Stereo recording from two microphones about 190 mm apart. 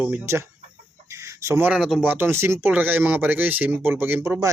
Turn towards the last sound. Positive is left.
turn(degrees=-15)  # may be behind; listen again after turning